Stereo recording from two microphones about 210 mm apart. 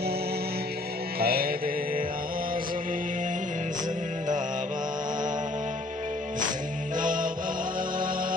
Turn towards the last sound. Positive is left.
turn(degrees=-40)  # may be behind; listen again after turning